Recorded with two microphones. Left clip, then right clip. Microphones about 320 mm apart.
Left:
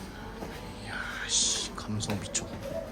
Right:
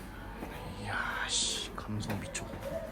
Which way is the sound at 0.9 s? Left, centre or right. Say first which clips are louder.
Even; centre.